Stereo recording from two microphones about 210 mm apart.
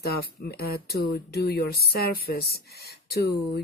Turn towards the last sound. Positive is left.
turn(degrees=50)  # may be behind; listen again after turning